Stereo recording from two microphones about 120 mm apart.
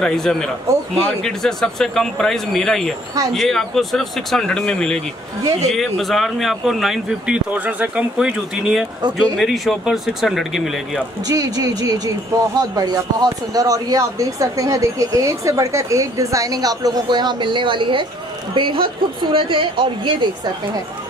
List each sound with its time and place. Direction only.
0.0 s speech: 5° left (ahead or behind)
11.2 s speech: 30° right (ahead or behind)